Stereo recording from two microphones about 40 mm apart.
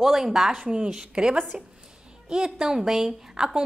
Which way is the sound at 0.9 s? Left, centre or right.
Right.